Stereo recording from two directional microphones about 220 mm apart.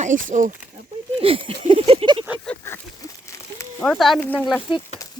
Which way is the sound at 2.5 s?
10° left (ahead or behind).